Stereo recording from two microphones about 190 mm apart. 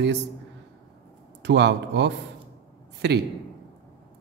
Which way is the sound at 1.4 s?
65° right (ahead or behind).